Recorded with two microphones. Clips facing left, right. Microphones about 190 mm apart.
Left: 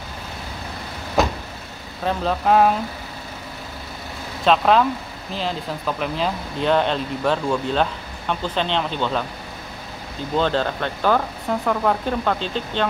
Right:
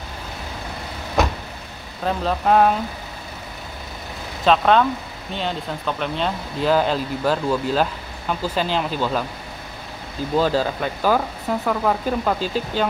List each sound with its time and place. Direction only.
2.0 s speech: centre (ahead or behind)
4.5 s speech: centre (ahead or behind)
10.3 s speech: 5° right (ahead or behind)